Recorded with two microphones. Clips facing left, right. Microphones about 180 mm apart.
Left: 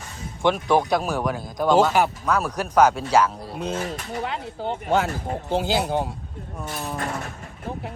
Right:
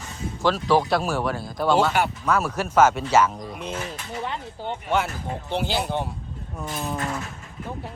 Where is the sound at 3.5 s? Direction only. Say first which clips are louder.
Left 4 dB; 30° left (ahead or behind).